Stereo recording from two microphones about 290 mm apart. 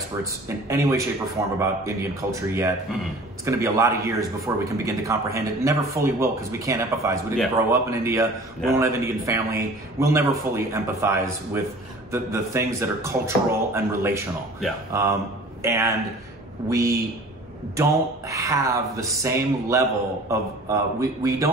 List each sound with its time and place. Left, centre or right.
0.2 s a man's voice: centre